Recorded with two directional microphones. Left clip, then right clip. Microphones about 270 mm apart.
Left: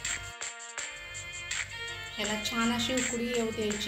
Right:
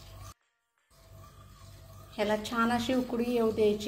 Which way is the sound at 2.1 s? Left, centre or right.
Right.